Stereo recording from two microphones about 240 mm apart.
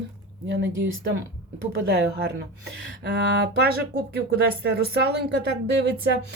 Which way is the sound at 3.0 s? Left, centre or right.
Right.